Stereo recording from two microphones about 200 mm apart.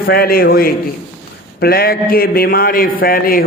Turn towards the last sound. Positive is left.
turn(degrees=45)  # may be behind; listen again after turning